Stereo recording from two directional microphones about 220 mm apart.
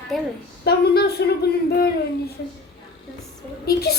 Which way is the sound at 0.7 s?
45° left (ahead or behind).